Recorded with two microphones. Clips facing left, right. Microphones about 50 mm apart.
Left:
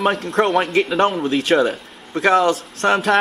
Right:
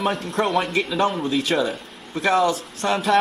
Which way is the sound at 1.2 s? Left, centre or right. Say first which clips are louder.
Left 5 dB; left.